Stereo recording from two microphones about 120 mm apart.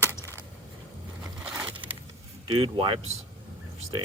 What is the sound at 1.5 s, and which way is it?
Crushing, 15° right (ahead or behind).